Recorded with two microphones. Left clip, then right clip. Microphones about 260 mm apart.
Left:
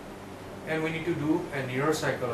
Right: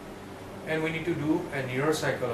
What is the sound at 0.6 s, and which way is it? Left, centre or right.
Speech, centre.